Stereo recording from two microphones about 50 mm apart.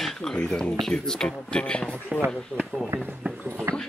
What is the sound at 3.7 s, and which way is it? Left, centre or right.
Speech, right.